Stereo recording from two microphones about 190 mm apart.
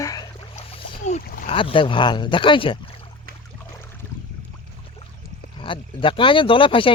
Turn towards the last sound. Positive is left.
turn(degrees=25)  # may be behind; listen again after turning